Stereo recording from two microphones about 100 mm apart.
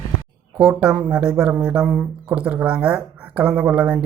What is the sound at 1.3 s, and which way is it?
Speech, 10° right (ahead or behind).